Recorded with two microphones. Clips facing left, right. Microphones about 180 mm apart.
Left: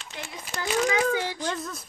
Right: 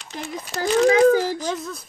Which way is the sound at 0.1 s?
40° right (ahead or behind).